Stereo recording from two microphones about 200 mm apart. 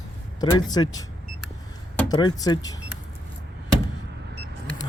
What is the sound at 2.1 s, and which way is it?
Speech, 20° left (ahead or behind).